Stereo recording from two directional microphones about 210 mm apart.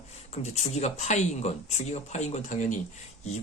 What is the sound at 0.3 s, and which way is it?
Speech, 30° left (ahead or behind).